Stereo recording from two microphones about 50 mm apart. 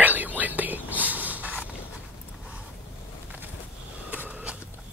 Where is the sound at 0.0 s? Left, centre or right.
Right.